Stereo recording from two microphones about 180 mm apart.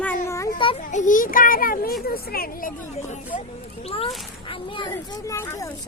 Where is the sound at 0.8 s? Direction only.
45° left (ahead or behind).